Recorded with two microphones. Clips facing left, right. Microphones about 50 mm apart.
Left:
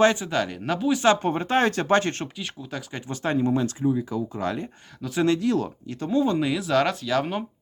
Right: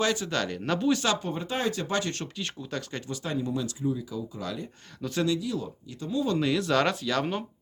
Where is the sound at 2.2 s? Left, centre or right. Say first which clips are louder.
Left 2 dB; centre.